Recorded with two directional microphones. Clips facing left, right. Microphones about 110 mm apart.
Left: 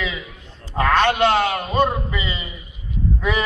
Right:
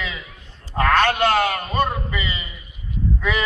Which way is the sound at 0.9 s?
15° left (ahead or behind).